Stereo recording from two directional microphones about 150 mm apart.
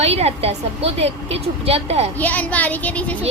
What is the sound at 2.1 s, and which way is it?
Speech, 10° left (ahead or behind).